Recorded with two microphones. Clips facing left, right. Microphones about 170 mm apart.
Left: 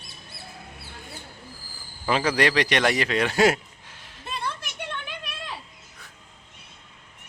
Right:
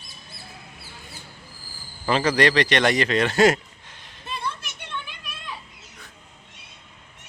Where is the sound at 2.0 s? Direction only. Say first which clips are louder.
Right 2 dB; 5° left (ahead or behind).